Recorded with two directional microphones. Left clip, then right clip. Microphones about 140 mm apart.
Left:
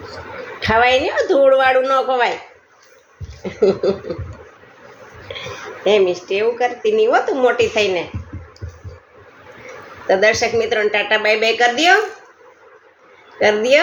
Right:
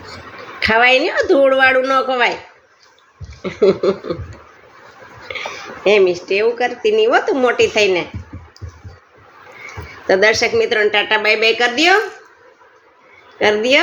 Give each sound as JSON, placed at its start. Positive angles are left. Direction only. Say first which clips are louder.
{"t": 0.6, "sound": "speech", "louder": "right 2 dB", "side_deg": -75}
{"t": 3.4, "sound": "speech", "louder": "right 2 dB", "side_deg": -70}
{"t": 5.8, "sound": "speech", "louder": "right 2 dB", "side_deg": -75}
{"t": 10.1, "sound": "speech", "louder": "right 1 dB", "side_deg": -75}
{"t": 13.4, "sound": "a woman's voice", "louder": "even", "side_deg": -60}